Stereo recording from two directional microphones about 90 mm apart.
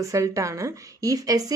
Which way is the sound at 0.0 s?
35° right (ahead or behind).